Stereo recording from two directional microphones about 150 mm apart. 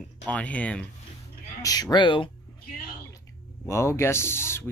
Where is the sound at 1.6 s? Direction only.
25° left (ahead or behind).